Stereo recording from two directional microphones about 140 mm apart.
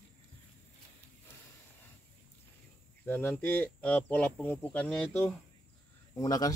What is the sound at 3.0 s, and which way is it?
Speech, 15° left (ahead or behind).